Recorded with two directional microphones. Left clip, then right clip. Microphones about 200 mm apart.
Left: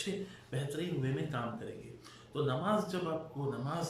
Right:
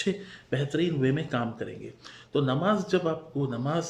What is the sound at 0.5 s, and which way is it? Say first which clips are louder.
Speech: right 11 dB; 45° right (ahead or behind).